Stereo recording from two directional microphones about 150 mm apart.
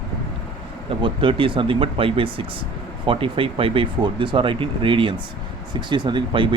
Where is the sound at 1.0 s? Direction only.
35° right (ahead or behind).